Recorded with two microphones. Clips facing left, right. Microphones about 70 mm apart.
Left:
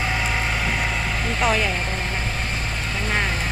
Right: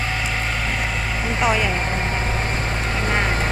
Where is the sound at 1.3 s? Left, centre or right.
Centre.